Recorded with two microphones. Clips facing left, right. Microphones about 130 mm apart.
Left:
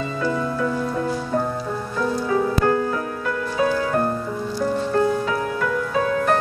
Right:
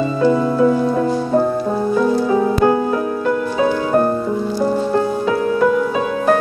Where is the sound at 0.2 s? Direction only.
30° right (ahead or behind).